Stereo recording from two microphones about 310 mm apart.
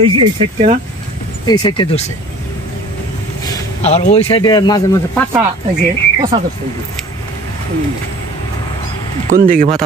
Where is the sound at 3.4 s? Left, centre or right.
Centre.